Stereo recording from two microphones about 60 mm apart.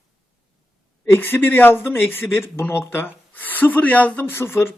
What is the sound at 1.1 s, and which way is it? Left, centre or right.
Speech, left.